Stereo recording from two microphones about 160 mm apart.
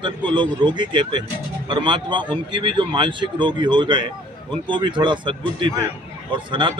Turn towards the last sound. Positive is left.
turn(degrees=-30)  # may be behind; listen again after turning